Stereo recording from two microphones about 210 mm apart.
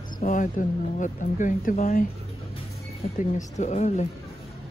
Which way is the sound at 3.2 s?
35° left (ahead or behind).